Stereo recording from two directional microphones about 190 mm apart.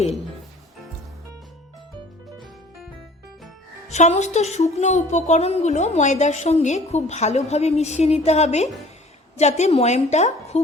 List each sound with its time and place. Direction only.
3.8 s a woman's voice: 35° left (ahead or behind)